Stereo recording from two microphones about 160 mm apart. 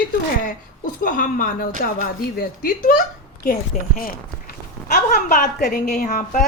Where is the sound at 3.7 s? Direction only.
50° left (ahead or behind).